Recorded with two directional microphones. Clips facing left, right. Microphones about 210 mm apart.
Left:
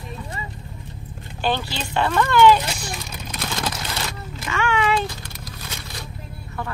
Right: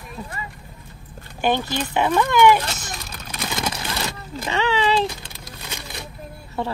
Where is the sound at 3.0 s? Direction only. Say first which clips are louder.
Left 1 dB; 5° right (ahead or behind).